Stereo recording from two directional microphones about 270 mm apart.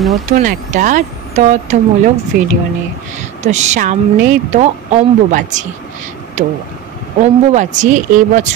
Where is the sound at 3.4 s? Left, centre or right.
Right.